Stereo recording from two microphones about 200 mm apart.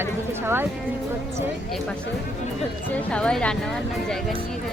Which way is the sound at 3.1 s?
5° left (ahead or behind).